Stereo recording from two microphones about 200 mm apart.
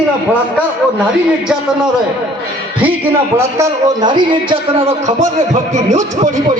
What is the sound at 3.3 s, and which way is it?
A man's voice, 15° right (ahead or behind).